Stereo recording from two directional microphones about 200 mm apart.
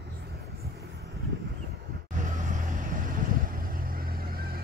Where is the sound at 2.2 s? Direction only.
40° right (ahead or behind).